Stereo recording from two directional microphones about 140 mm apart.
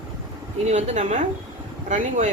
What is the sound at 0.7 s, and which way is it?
Speech, 55° right (ahead or behind).